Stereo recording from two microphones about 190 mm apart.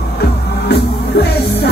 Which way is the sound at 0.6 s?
60° left (ahead or behind).